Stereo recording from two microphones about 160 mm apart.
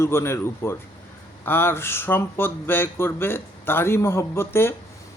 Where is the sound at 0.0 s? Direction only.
15° left (ahead or behind).